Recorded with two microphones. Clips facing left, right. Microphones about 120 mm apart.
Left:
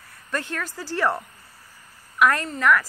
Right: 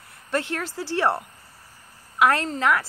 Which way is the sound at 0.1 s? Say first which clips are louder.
Right 3 dB; 25° right (ahead or behind).